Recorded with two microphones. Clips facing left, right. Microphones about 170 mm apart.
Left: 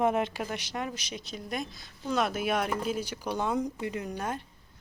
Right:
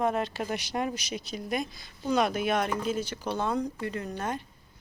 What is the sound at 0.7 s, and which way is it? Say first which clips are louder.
Speech: right 4 dB; 35° right (ahead or behind).